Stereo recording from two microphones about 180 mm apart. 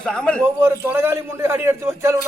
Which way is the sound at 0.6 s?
10° right (ahead or behind).